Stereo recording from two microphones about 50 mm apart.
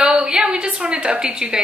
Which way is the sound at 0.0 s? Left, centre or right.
Centre.